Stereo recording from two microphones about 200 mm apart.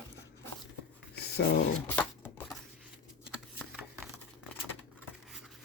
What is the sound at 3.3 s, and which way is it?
Shuffling cards, centre (ahead or behind).